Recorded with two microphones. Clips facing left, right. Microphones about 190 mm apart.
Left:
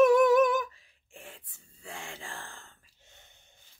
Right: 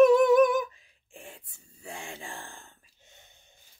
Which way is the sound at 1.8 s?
15° right (ahead or behind).